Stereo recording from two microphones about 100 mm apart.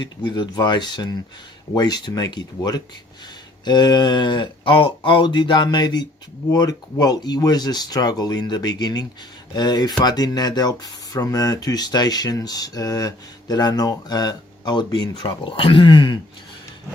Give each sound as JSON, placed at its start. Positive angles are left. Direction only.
{"t": 0.0, "sound": "speech", "side_deg": 50}